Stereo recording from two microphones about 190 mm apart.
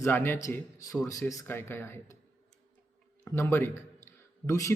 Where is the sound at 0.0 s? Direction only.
10° left (ahead or behind).